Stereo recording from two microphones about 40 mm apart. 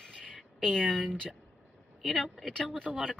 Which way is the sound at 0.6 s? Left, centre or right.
Centre.